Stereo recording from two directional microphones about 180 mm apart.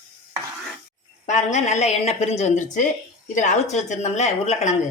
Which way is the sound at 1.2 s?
40° left (ahead or behind).